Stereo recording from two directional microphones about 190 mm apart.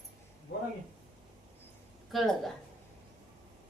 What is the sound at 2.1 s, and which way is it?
Speech, centre (ahead or behind).